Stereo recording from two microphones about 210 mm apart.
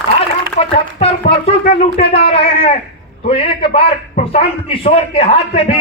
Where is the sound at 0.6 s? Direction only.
30° left (ahead or behind).